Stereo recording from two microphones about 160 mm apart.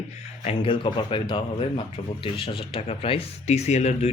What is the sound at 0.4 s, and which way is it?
A man's voice, 30° left (ahead or behind).